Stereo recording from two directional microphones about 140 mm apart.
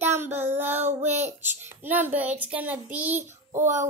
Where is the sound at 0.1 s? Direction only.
15° right (ahead or behind).